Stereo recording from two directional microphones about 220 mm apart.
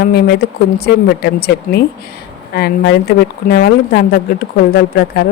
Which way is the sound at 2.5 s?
45° left (ahead or behind).